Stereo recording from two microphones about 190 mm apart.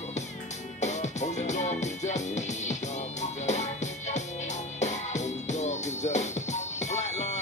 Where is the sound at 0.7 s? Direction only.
35° left (ahead or behind).